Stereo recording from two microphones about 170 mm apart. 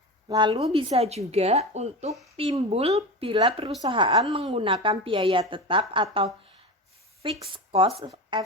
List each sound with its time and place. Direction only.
0.3 s a woman's voice: 25° right (ahead or behind)
7.5 s speech: 35° right (ahead or behind)